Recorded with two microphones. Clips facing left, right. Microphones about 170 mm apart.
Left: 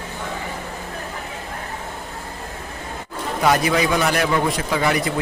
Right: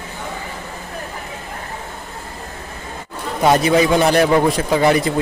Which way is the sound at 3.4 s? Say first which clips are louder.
Right 5 dB; 25° right (ahead or behind).